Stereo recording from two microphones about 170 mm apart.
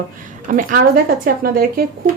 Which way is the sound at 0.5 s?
55° right (ahead or behind).